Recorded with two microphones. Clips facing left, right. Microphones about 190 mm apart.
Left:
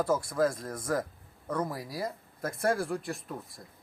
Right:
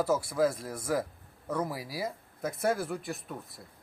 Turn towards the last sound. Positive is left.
turn(degrees=0)  # may be behind; listen again after turning